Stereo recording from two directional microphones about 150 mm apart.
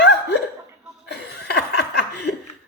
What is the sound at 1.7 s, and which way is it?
Laughter, 90° left.